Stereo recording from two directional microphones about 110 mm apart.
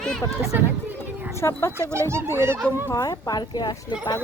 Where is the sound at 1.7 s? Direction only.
25° right (ahead or behind).